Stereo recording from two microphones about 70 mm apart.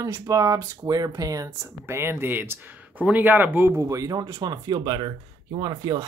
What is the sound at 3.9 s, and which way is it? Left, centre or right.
Speech, right.